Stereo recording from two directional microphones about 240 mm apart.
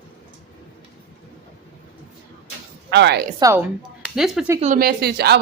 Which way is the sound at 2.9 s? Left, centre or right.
Right.